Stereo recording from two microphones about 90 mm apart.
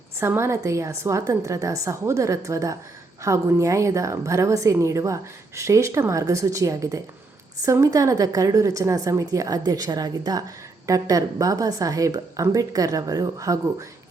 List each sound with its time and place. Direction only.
0.2 s a woman's voice: 30° right (ahead or behind)